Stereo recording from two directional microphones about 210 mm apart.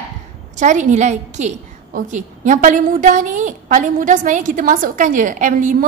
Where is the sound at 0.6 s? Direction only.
35° right (ahead or behind).